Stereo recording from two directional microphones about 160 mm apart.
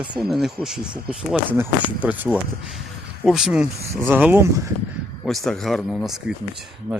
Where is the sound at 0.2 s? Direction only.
Centre (ahead or behind).